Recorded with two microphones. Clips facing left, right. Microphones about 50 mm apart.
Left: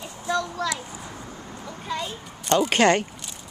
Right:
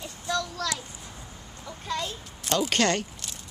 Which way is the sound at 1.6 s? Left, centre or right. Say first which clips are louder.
Left 1 dB; centre.